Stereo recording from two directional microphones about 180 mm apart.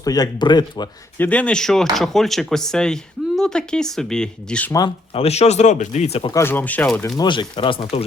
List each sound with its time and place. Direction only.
0.0 s speech: 20° left (ahead or behind)
1.2 s speech: 10° left (ahead or behind)
5.1 s speech: 35° left (ahead or behind)
6.3 s speech: 10° left (ahead or behind)
7.2 s speech: 25° left (ahead or behind)